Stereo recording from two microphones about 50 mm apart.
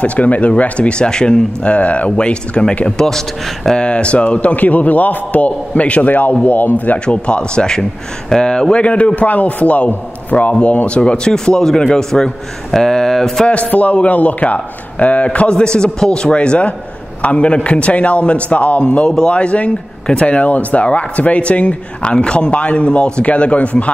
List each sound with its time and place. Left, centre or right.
0.0 s speech: left
3.0 s a man's voice: centre
3.8 s a man's voice: left
7.2 s a man's voice: centre
13.5 s speech: left